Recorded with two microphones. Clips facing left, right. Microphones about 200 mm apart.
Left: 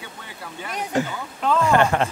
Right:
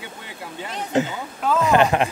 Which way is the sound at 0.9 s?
20° right (ahead or behind).